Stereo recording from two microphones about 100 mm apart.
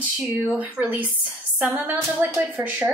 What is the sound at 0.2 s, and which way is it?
Speech, 10° right (ahead or behind).